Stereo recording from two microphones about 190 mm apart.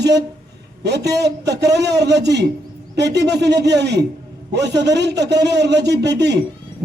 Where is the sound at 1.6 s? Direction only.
65° right (ahead or behind).